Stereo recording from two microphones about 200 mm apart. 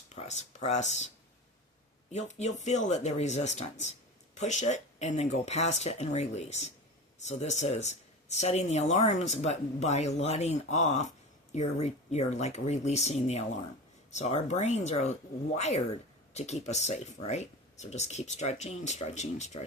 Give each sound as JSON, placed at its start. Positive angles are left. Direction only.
{"t": 0.1, "sound": "speech", "side_deg": 35}
{"t": 2.1, "sound": "speech", "side_deg": 35}